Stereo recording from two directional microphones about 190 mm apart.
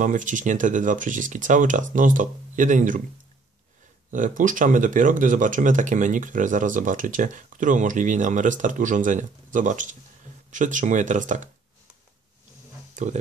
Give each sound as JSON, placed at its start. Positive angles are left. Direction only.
{"t": 0.0, "sound": "speech", "side_deg": -40}
{"t": 4.1, "sound": "speech", "side_deg": -45}
{"t": 12.9, "sound": "speech", "side_deg": -40}